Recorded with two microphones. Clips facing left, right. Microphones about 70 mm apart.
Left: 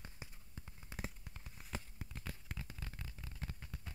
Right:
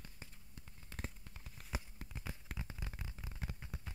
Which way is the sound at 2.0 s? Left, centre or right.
Centre.